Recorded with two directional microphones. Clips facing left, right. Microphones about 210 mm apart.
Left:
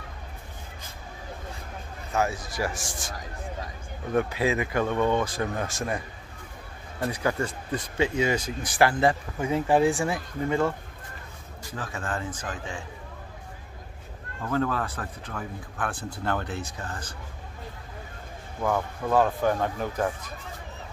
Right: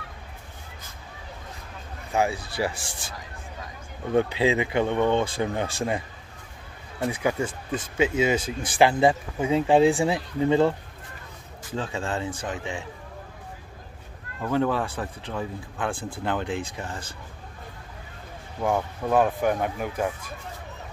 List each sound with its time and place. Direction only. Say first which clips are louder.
2.1 s speech: right 2 dB; 15° right (ahead or behind)
4.1 s speech: right 3 dB; 25° right (ahead or behind)
7.2 s speech: right 1 dB; 10° right (ahead or behind)
11.7 s speech: right 4 dB; 25° right (ahead or behind)
14.4 s speech: right 3 dB; 20° right (ahead or behind)
18.6 s speech: right 1 dB; 15° right (ahead or behind)